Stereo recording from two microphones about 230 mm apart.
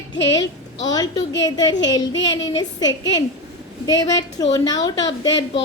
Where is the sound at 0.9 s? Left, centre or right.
Centre.